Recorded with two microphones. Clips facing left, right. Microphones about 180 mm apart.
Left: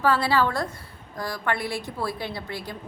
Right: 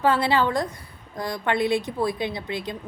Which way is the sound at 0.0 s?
20° right (ahead or behind).